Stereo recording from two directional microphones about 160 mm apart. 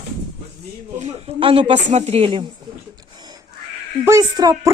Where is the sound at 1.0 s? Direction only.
40° right (ahead or behind).